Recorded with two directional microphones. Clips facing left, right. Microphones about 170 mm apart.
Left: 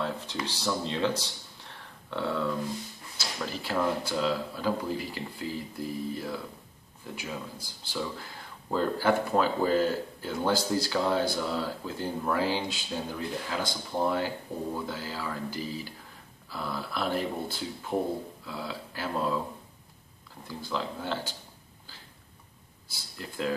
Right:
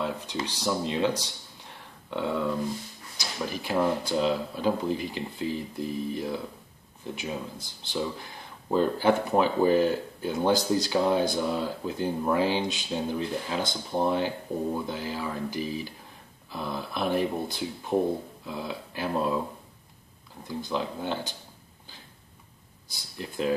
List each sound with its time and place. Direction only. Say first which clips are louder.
0.0 s speech: right 2 dB; 15° right (ahead or behind)
20.4 s speech: right 3 dB; 20° right (ahead or behind)
22.8 s speech: right 4 dB; 20° right (ahead or behind)